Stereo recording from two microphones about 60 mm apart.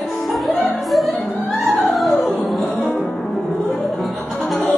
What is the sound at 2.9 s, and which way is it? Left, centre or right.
Music, left.